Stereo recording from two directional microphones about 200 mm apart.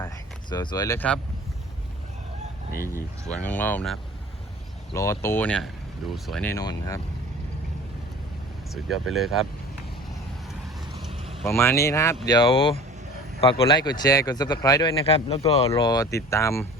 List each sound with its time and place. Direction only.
0.5 s speech: 20° left (ahead or behind)
3.2 s speech: 5° left (ahead or behind)
4.9 s speech: 15° left (ahead or behind)
6.5 s speech: 20° left (ahead or behind)
8.7 s speech: centre (ahead or behind)
10.5 s vehicle: centre (ahead or behind)
11.1 s vehicle: 25° right (ahead or behind)
11.4 s speech: 10° left (ahead or behind)
12.3 s speech: 25° left (ahead or behind)